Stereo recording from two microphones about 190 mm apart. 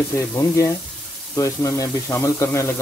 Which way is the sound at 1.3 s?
15° left (ahead or behind).